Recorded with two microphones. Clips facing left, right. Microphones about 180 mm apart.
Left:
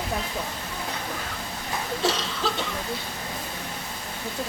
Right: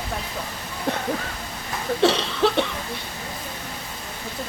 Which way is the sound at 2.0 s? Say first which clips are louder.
Right 9 dB; 65° right (ahead or behind).